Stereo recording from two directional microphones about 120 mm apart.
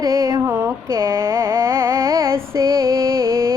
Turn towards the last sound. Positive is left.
turn(degrees=-25)  # may be behind; listen again after turning